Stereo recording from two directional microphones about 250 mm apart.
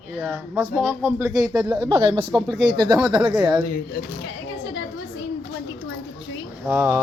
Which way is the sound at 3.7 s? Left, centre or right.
Left.